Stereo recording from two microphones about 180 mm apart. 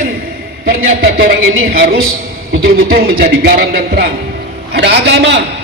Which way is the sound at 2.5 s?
55° right (ahead or behind).